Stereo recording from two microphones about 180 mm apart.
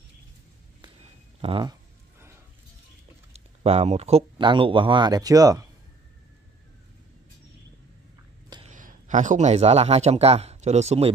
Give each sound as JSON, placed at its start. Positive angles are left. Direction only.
{"t": 1.4, "sound": "a sound", "side_deg": -25}
{"t": 3.3, "sound": "speech", "side_deg": -35}
{"t": 8.6, "sound": "a man's voice", "side_deg": -45}